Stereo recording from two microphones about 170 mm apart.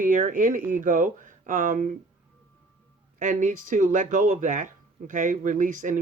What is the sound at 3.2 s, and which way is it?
Speech, 50° right (ahead or behind).